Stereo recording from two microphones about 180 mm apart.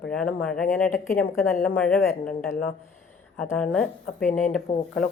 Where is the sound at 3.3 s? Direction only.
10° left (ahead or behind).